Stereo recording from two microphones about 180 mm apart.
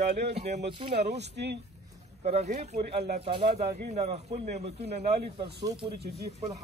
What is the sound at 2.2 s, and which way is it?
A man's voice, 40° right (ahead or behind).